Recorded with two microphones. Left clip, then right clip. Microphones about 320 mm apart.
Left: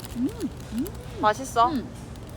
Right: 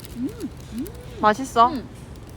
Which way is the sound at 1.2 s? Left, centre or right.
Right.